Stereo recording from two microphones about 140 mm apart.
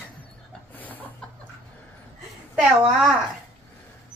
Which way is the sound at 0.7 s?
10° left (ahead or behind).